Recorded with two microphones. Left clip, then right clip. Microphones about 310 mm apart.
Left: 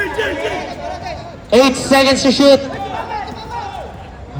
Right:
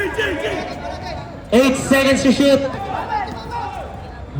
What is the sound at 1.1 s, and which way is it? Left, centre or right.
A man's voice, left.